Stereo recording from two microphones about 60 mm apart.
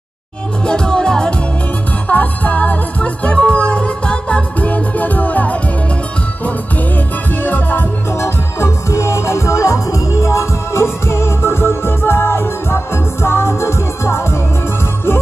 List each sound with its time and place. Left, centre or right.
0.7 s music: centre
2.0 s music: left
7.4 s music: left
8.1 s music: left